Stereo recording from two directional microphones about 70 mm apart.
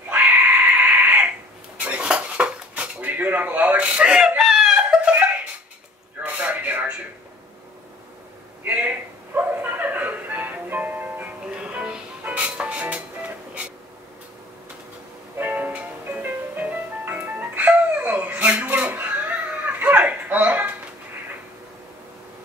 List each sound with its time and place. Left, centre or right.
0.1 s cat: right
1.8 s dishes: centre
6.2 s a sound: right
8.6 s music: right
15.3 s music: right